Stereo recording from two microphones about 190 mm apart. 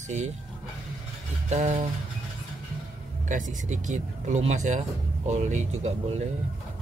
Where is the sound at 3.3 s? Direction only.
40° right (ahead or behind).